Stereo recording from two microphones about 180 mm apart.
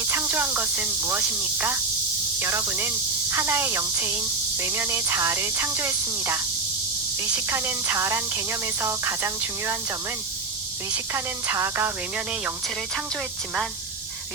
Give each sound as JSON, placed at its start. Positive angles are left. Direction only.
{"t": 0.0, "sound": "speech", "side_deg": -15}
{"t": 10.9, "sound": "speech", "side_deg": -10}